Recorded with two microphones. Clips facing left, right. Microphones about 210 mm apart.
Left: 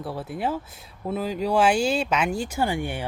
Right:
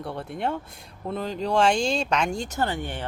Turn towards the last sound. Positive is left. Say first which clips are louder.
# left 2 dB
turn(degrees=10)  # may be behind; listen again after turning